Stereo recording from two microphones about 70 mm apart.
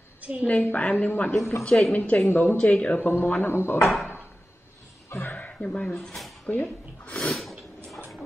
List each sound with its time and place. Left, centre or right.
0.2 s a woman's voice: centre
0.7 s a woman's voice: left
3.5 s speech: left
3.8 s speech: centre
5.1 s a sound: left
5.5 s speech: centre
5.9 s speech: centre
6.4 s a sound: centre
7.3 s a sound: centre